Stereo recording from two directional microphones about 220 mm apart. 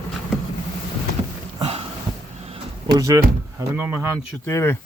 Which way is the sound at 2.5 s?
15° right (ahead or behind).